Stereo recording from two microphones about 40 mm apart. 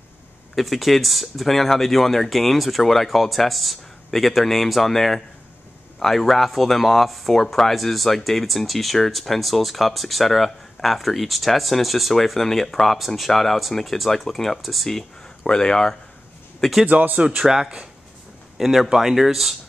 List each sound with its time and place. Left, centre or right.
0.6 s speech: centre
15.4 s speech: centre
16.8 s speech: right
17.4 s speech: centre